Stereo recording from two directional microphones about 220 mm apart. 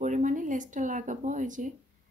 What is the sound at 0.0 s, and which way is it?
A woman's voice, 35° right (ahead or behind).